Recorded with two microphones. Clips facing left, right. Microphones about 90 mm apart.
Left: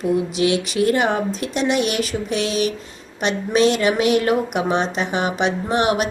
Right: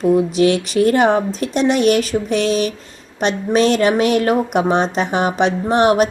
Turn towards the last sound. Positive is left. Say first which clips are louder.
# right 5 dB
turn(degrees=-40)  # may be behind; listen again after turning